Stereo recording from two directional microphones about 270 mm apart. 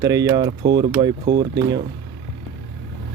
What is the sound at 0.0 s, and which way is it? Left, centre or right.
Speech, centre.